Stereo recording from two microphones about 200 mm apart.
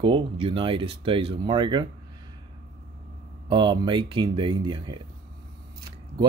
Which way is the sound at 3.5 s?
25° right (ahead or behind).